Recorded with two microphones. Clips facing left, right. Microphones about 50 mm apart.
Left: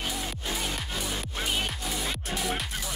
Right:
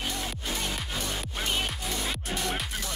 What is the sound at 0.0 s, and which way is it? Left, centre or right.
Music, centre.